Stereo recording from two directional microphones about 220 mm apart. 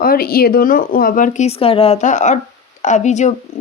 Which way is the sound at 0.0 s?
45° left (ahead or behind).